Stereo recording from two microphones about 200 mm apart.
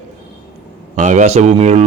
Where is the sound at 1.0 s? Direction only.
35° right (ahead or behind).